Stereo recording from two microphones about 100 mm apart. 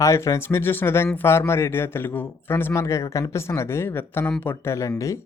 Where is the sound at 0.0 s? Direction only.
30° left (ahead or behind).